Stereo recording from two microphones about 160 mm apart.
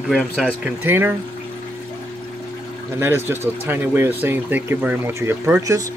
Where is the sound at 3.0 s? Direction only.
15° right (ahead or behind).